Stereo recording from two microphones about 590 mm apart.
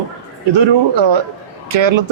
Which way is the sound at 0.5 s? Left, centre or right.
Right.